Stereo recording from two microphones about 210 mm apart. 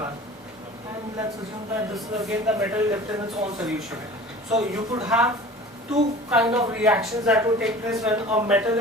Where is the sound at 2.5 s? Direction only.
15° right (ahead or behind).